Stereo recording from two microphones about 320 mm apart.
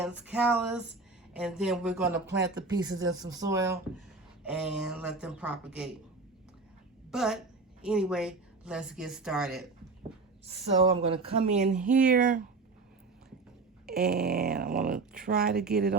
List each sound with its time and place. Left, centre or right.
0.0 s speech: centre
2.9 s speech: right
3.2 s speech: centre
7.1 s a woman's voice: centre
11.1 s speech: centre
13.8 s speech: right